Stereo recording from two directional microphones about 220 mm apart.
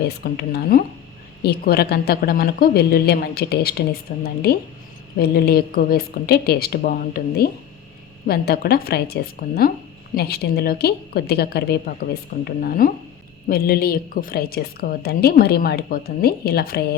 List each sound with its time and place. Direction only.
0.3 s a woman's voice: 45° left (ahead or behind)